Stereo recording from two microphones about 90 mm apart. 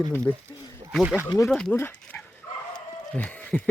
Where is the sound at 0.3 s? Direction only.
20° left (ahead or behind).